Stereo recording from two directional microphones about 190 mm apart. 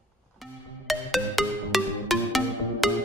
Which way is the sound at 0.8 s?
Centre (ahead or behind).